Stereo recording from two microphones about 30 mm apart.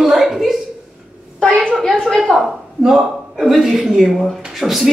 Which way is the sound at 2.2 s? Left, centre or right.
Centre.